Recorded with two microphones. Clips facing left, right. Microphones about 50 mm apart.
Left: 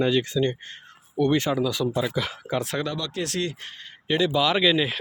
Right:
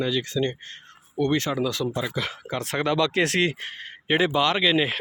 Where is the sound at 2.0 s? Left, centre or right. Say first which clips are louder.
Left 2 dB; centre.